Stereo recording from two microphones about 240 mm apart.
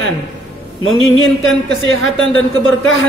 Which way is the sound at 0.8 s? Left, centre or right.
Left.